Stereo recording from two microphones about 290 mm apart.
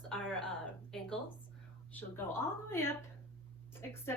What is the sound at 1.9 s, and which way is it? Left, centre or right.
Speech, centre.